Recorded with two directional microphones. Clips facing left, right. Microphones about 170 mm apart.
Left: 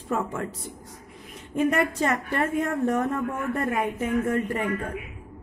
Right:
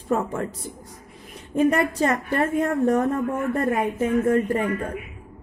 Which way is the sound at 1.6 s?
35° right (ahead or behind).